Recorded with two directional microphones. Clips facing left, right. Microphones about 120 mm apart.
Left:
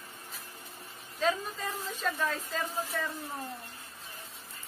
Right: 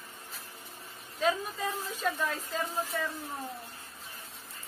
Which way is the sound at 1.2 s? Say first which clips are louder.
Right 1 dB; 10° right (ahead or behind).